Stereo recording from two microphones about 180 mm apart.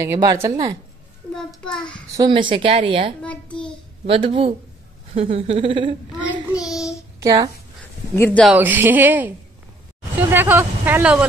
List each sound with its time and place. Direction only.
0.0 s speech: 20° right (ahead or behind)
1.3 s a child's voice: 5° left (ahead or behind)
2.1 s speech: 25° right (ahead or behind)
3.2 s a child's voice: 5° left (ahead or behind)
4.0 s speech: 30° right (ahead or behind)
6.7 s child singing: centre (ahead or behind)
7.2 s speech: 20° right (ahead or behind)
8.2 s speech: 10° left (ahead or behind)
8.5 s speech: 10° right (ahead or behind)
10.3 s speech: 10° right (ahead or behind)